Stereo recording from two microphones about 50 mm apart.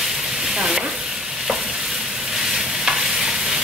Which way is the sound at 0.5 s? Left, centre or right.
Centre.